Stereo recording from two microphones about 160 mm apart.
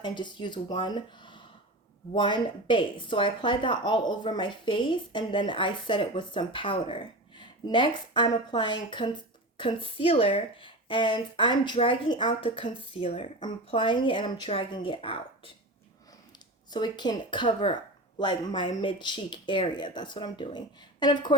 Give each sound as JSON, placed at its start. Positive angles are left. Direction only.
{"t": 0.0, "sound": "speech", "side_deg": 30}
{"t": 16.7, "sound": "speech", "side_deg": 25}